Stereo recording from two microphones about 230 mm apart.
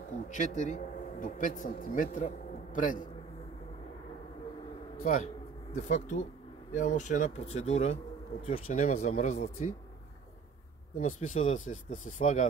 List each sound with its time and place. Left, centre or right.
0.3 s a man's voice: left
5.8 s speech: left
11.0 s speech: left